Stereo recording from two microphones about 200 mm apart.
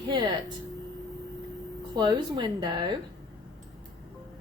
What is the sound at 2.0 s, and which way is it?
Speech, 20° right (ahead or behind).